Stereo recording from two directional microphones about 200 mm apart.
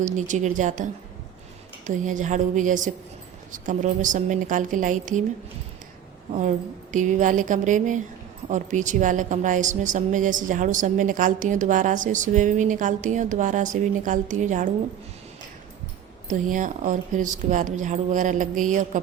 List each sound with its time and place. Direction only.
0.0 s a woman's voice: 35° right (ahead or behind)
1.9 s a woman's voice: 40° right (ahead or behind)
6.9 s a woman's voice: 40° right (ahead or behind)
16.3 s a woman's voice: 40° right (ahead or behind)